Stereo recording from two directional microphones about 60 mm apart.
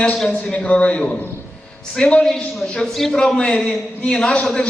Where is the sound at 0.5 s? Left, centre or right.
Centre.